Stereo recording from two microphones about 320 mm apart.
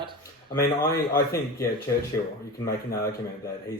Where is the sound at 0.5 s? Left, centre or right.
Left.